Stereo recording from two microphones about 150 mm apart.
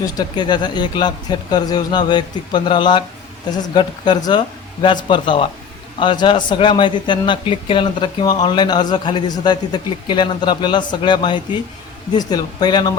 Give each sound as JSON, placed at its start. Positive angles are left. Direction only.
{"t": 0.0, "sound": "a man's voice", "side_deg": 25}